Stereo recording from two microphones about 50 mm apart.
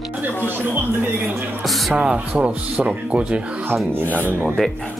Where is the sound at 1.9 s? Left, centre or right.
Right.